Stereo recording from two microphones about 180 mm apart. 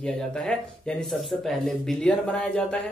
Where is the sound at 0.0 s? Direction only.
5° left (ahead or behind).